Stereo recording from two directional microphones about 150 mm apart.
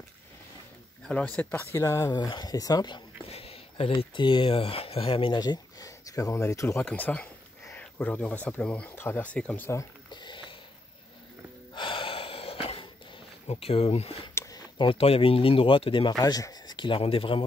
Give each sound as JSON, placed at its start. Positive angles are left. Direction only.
{"t": 1.0, "sound": "speech", "side_deg": 10}
{"t": 3.3, "sound": "speech", "side_deg": 40}
{"t": 6.9, "sound": "speech", "side_deg": 10}
{"t": 10.1, "sound": "a sound", "side_deg": 30}
{"t": 11.7, "sound": "gasp", "side_deg": 35}
{"t": 13.5, "sound": "speech", "side_deg": 40}
{"t": 14.3, "sound": "a sound", "side_deg": 20}
{"t": 14.8, "sound": "speech", "side_deg": 35}